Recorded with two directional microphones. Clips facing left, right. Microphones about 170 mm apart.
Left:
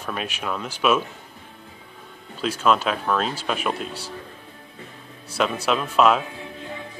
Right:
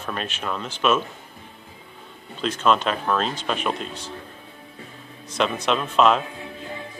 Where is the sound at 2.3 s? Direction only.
5° left (ahead or behind).